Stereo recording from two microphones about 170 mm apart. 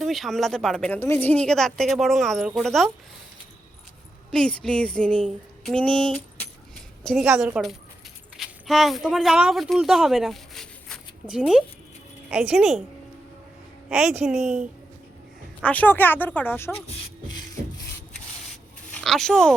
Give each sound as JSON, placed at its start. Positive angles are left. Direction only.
{"t": 0.0, "sound": "speech", "side_deg": 0}
{"t": 4.3, "sound": "speech", "side_deg": 5}
{"t": 13.9, "sound": "speech", "side_deg": -5}
{"t": 15.6, "sound": "speech", "side_deg": 10}
{"t": 16.7, "sound": "speech", "side_deg": 35}
{"t": 19.0, "sound": "speech", "side_deg": 5}